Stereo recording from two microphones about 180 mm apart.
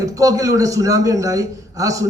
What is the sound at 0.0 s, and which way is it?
A man's voice, 20° right (ahead or behind).